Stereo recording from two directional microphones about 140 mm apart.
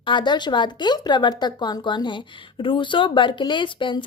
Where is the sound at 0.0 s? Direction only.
35° left (ahead or behind).